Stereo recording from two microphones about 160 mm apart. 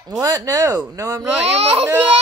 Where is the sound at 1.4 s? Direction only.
40° right (ahead or behind).